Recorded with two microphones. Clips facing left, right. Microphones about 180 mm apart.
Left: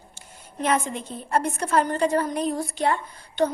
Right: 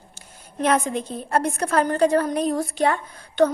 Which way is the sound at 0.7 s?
45° right (ahead or behind).